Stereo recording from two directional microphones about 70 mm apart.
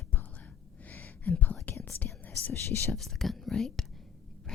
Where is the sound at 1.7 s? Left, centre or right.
Left.